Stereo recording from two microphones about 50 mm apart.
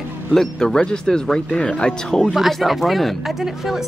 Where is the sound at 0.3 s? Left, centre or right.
Centre.